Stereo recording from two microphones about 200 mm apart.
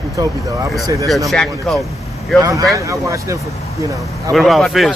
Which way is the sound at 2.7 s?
15° right (ahead or behind).